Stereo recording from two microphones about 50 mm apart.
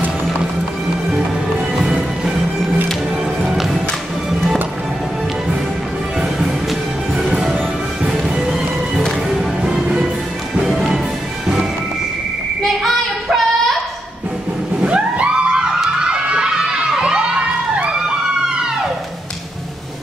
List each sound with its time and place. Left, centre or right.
3.4 s music: centre
6.1 s music: centre
9.3 s music: centre
10.6 s music: centre
12.8 s female singing: centre
14.8 s music: right
16.0 s crowd: centre
18.0 s police car: centre